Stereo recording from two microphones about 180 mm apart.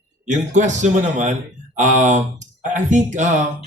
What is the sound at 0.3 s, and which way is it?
Speech, 40° right (ahead or behind).